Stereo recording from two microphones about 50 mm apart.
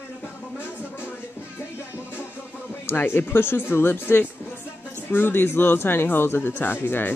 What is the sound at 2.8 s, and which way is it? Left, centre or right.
Speech, left.